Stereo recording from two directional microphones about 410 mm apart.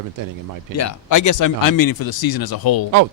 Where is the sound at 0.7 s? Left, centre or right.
Left.